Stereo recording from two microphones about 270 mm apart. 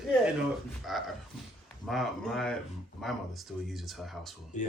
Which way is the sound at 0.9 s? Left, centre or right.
Centre.